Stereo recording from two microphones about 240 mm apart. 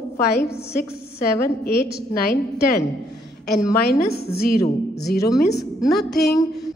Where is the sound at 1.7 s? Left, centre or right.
Left.